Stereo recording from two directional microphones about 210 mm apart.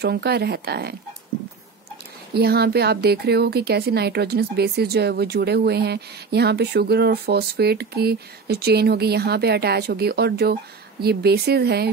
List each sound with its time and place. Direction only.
0.0 s a woman's voice: 50° right (ahead or behind)
2.3 s a woman's voice: 50° right (ahead or behind)